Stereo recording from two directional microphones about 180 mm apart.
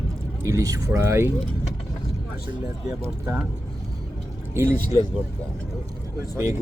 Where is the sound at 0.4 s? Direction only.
20° right (ahead or behind).